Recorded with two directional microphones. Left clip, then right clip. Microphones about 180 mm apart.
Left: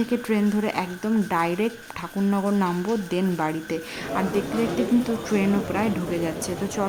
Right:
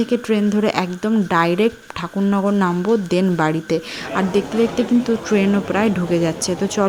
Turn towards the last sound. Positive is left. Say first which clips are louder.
# right 7 dB
turn(degrees=-25)  # may be behind; listen again after turning